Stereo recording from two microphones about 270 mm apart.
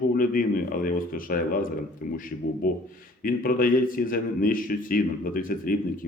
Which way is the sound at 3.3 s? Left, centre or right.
Left.